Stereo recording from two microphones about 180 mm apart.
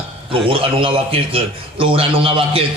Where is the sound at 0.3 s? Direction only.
30° right (ahead or behind).